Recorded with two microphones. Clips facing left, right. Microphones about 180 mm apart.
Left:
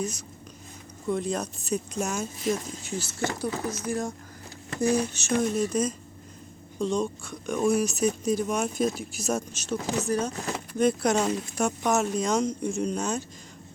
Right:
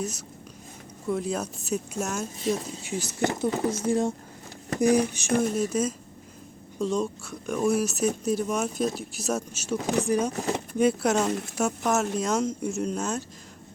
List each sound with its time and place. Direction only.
0.0 s speech: 5° right (ahead or behind); by 4.1 s 25° right (ahead or behind)
4.8 s speech: 15° right (ahead or behind)